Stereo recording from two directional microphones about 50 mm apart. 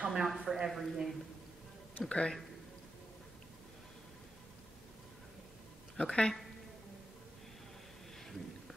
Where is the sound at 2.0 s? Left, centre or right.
Left.